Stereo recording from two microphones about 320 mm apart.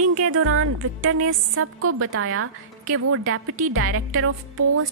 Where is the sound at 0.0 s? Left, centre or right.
Right.